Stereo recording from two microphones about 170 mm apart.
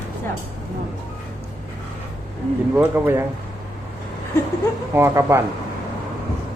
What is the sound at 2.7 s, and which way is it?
Speech, 15° right (ahead or behind).